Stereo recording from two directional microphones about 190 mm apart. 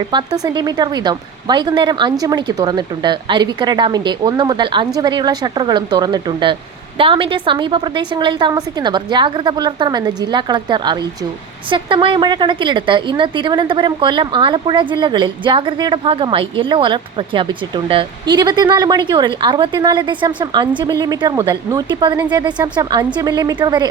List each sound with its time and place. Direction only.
0.1 s a woman's voice: 20° right (ahead or behind)